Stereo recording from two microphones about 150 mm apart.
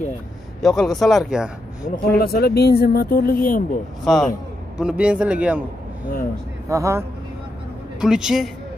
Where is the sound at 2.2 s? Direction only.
90° left; by 3.6 s 70° left (ahead or behind).